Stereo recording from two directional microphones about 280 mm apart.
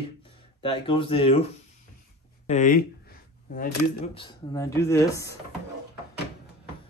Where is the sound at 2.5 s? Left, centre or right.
Left.